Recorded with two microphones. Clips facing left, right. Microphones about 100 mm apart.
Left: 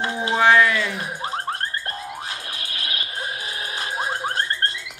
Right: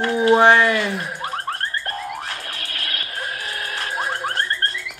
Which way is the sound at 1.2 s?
20° left (ahead or behind).